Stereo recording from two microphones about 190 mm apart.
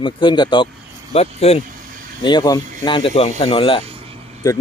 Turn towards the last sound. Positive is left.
turn(degrees=-30)  # may be behind; listen again after turning